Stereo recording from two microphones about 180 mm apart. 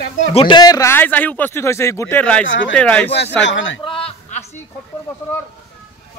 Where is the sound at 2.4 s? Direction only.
90° left.